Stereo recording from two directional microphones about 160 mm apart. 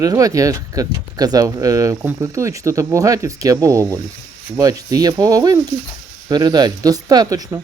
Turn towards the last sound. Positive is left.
turn(degrees=-25)  # may be behind; listen again after turning